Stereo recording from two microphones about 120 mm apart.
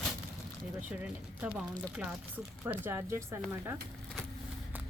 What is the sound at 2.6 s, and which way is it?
Speech, 20° right (ahead or behind).